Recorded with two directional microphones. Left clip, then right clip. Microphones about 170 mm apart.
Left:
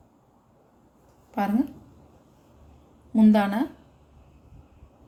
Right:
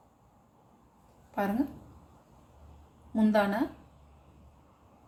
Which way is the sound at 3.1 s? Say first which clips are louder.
Left 5 dB; 50° left (ahead or behind).